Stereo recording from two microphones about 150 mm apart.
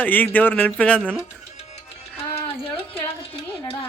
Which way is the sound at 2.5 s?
40° left (ahead or behind).